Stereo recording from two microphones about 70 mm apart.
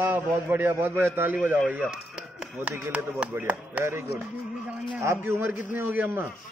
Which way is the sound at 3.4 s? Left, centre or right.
Right.